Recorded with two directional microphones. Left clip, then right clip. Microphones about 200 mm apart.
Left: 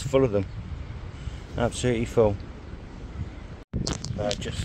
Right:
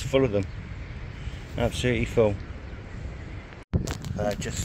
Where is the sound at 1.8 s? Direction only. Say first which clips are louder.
Left 1 dB; centre (ahead or behind).